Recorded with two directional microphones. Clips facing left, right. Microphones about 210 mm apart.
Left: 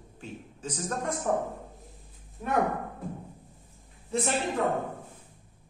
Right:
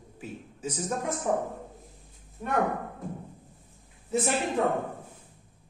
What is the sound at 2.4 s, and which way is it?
Speech, 5° left (ahead or behind).